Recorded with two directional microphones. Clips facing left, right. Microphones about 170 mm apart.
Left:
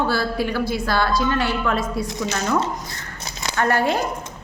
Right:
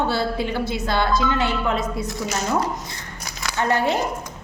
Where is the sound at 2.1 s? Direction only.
20° left (ahead or behind).